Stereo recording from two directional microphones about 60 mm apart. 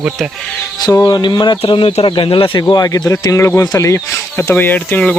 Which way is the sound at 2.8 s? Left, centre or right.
Left.